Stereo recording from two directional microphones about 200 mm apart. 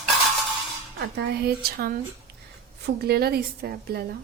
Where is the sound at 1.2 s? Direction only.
55° right (ahead or behind).